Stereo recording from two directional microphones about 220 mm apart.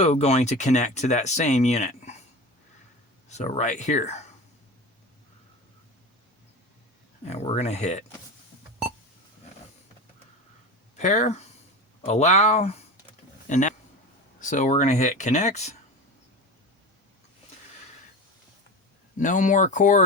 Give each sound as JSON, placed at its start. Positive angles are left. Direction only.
{"t": 0.0, "sound": "speech", "side_deg": 30}
{"t": 3.2, "sound": "speech", "side_deg": 30}
{"t": 7.3, "sound": "speech", "side_deg": 30}
{"t": 10.9, "sound": "speech", "side_deg": 35}
{"t": 19.2, "sound": "speech", "side_deg": 35}